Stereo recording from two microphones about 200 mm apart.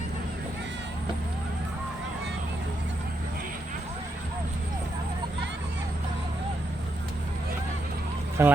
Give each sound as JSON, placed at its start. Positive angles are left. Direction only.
{"t": 8.4, "sound": "speech", "side_deg": -10}